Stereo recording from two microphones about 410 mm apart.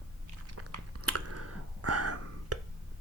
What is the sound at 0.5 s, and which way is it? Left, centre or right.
Chewing, right.